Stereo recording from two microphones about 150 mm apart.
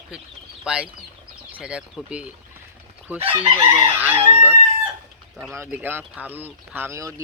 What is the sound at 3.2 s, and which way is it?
Chicken, 40° right (ahead or behind).